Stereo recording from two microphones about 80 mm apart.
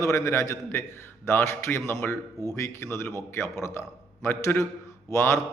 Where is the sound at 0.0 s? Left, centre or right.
Left.